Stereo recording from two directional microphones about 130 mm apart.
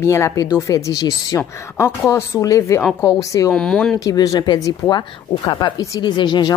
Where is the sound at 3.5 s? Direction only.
5° left (ahead or behind).